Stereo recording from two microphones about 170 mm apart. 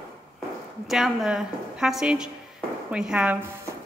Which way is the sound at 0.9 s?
Centre (ahead or behind).